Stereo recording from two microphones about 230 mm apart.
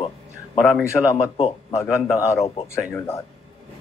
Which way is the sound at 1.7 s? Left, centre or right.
Centre.